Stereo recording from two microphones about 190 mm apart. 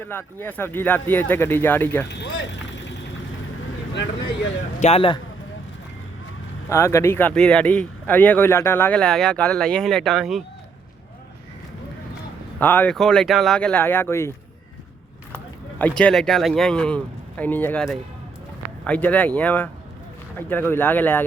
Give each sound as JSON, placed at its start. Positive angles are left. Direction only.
{"t": 0.0, "sound": "speech", "side_deg": 10}
{"t": 2.0, "sound": "speech", "side_deg": 65}
{"t": 4.8, "sound": "speech", "side_deg": 30}
{"t": 6.7, "sound": "speech", "side_deg": 15}
{"t": 12.5, "sound": "speech", "side_deg": 10}
{"t": 15.8, "sound": "speech", "side_deg": 5}